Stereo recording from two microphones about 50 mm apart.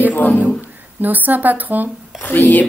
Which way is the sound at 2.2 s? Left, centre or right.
Left.